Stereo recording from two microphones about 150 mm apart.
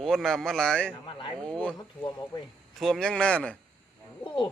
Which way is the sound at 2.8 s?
5° left (ahead or behind).